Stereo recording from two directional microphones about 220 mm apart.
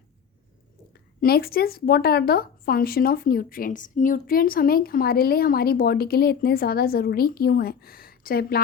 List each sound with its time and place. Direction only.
1.2 s speech: 45° left (ahead or behind)